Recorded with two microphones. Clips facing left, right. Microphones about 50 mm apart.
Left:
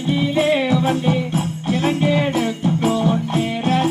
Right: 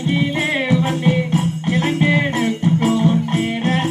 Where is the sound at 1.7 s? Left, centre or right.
Right.